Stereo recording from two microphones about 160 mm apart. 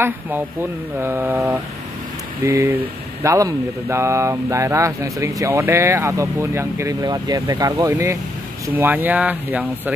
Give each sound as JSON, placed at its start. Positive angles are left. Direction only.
{"t": 0.0, "sound": "speech", "side_deg": -15}